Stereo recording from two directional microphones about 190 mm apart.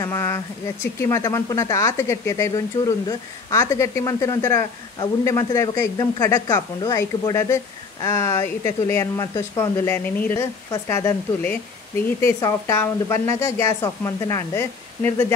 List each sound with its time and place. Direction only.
0.0 s speech: 15° left (ahead or behind)